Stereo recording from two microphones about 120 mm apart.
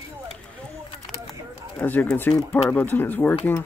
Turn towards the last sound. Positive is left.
turn(degrees=15)  # may be behind; listen again after turning